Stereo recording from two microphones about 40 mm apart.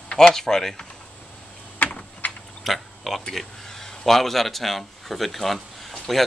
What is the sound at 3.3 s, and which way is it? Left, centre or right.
Speech, centre.